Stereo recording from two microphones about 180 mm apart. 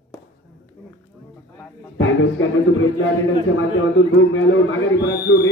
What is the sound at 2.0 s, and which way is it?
Speech, 90° left.